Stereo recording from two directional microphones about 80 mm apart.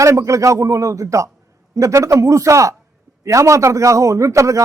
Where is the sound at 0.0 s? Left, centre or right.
Right.